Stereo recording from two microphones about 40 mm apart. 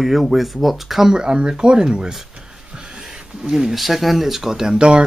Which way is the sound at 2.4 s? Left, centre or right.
Centre.